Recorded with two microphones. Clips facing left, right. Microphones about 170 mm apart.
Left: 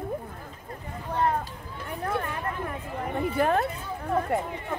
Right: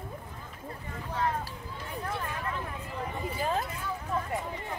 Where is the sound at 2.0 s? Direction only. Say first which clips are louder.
Left 6 dB; 60° left (ahead or behind).